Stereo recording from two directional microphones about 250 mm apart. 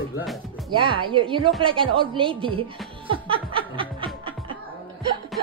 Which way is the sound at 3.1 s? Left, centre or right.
Right.